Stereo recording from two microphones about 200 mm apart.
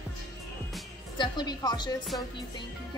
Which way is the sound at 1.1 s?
20° left (ahead or behind).